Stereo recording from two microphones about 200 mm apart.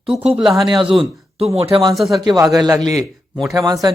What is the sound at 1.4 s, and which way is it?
Speech, 30° right (ahead or behind).